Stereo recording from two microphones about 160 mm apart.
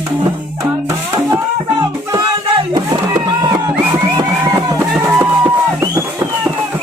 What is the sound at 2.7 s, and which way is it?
Music, 20° right (ahead or behind).